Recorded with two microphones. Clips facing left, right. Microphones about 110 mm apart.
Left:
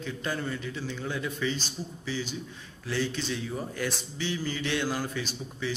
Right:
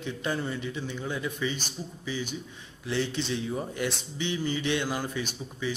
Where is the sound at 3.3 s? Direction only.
20° right (ahead or behind).